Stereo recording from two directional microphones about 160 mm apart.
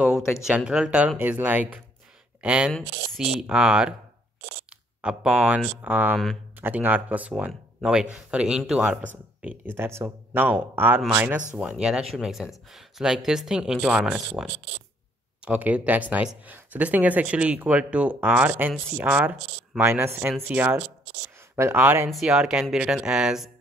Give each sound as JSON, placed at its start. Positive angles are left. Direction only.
{"t": 0.0, "sound": "speech", "side_deg": -5}
{"t": 4.6, "sound": "a sound", "side_deg": -5}
{"t": 5.8, "sound": "speech", "side_deg": -10}